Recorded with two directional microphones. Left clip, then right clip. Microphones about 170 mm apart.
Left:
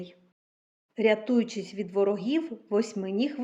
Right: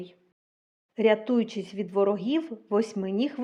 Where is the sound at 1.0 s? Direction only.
20° right (ahead or behind).